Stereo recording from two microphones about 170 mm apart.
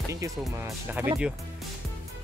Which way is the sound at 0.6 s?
10° right (ahead or behind).